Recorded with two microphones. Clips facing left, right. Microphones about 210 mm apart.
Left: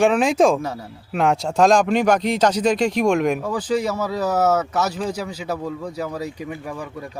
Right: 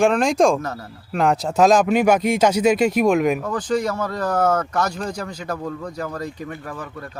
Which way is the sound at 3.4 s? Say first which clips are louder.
Even; 10° left (ahead or behind).